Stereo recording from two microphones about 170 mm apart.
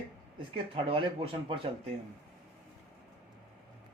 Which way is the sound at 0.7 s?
30° right (ahead or behind).